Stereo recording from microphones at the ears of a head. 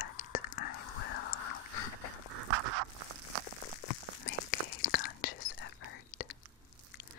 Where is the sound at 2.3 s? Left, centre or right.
Right.